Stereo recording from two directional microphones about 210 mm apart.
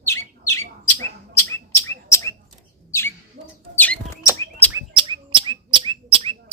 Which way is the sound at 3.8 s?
5° left (ahead or behind).